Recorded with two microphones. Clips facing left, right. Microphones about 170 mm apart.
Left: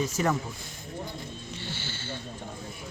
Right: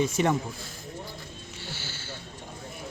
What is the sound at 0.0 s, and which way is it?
Speech, 25° right (ahead or behind).